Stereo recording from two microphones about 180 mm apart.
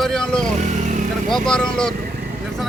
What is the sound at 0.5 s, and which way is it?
Vehicle, 40° right (ahead or behind).